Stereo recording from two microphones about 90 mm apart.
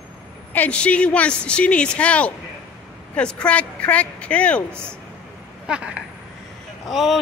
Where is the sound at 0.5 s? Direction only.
15° left (ahead or behind).